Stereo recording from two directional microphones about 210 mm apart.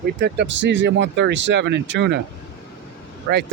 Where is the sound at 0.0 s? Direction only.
55° right (ahead or behind).